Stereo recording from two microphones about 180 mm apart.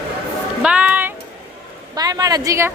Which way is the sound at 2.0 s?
20° right (ahead or behind).